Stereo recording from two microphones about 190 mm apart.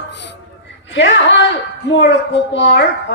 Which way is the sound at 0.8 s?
70° left (ahead or behind).